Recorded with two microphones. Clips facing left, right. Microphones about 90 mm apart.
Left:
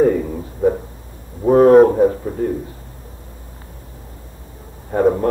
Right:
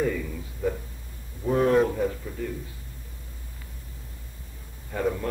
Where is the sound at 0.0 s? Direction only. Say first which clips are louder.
Left 12 dB; 45° left (ahead or behind).